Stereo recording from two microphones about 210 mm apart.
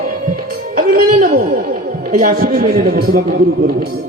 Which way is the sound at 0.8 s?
45° right (ahead or behind).